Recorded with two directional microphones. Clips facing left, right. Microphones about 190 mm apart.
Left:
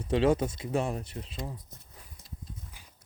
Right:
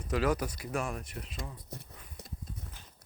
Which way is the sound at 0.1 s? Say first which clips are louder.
Left 5 dB; 25° left (ahead or behind).